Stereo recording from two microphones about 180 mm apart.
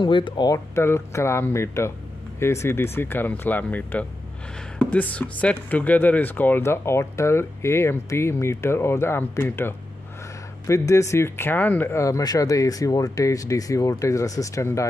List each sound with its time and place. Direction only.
0.0 s speech: 25° left (ahead or behind)